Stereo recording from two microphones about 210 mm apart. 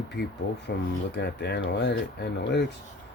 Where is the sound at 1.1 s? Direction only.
55° left (ahead or behind).